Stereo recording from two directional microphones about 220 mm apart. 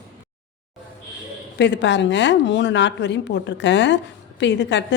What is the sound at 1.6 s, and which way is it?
A woman's voice, 55° left (ahead or behind).